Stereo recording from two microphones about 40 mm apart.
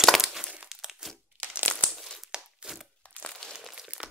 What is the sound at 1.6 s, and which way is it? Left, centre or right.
Crumpling, left.